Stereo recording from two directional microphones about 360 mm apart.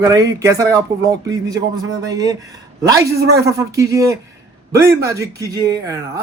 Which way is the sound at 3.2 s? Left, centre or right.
Right.